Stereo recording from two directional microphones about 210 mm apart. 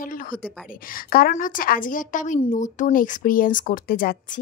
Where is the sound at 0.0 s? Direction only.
40° left (ahead or behind).